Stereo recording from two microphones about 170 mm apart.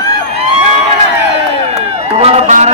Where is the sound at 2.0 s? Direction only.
40° right (ahead or behind).